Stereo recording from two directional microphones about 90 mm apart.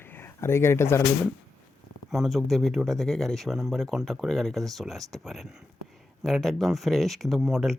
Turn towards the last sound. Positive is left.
turn(degrees=-5)  # may be behind; listen again after turning